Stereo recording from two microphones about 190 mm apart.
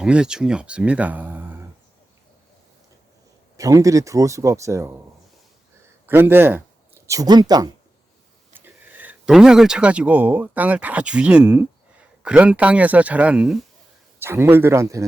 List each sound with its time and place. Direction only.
0.0 s a man's voice: 5° right (ahead or behind)
3.6 s speech: 15° right (ahead or behind)
6.1 s speech: 10° right (ahead or behind)
8.5 s speech: 10° right (ahead or behind)